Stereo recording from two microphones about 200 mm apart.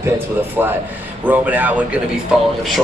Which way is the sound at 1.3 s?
10° right (ahead or behind).